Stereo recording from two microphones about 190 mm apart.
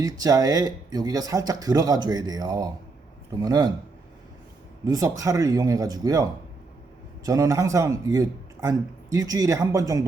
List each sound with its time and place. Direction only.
0.0 s speech: 20° right (ahead or behind)
4.9 s speech: 20° right (ahead or behind)
7.3 s speech: 20° right (ahead or behind)